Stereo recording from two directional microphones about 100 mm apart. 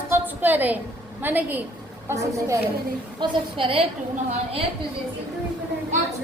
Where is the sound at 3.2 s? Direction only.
60° right (ahead or behind).